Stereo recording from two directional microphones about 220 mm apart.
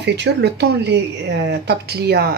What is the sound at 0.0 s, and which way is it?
Speech, 50° right (ahead or behind).